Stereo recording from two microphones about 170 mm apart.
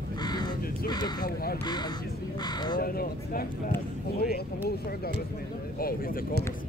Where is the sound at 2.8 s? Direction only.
60° left (ahead or behind).